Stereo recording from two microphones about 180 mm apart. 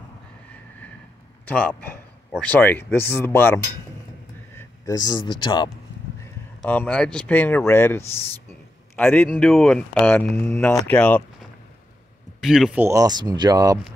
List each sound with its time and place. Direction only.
1.4 s a man's voice: 5° left (ahead or behind); by 5.7 s 25° left (ahead or behind)
6.6 s speech: 10° left (ahead or behind)
12.4 s speech: centre (ahead or behind)
12.8 s speech: 20° right (ahead or behind)